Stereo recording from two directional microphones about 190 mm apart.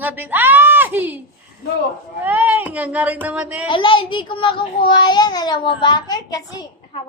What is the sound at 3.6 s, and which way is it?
A child's voice, 25° left (ahead or behind).